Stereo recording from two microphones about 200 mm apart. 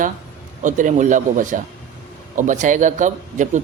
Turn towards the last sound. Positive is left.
turn(degrees=-40)  # may be behind; listen again after turning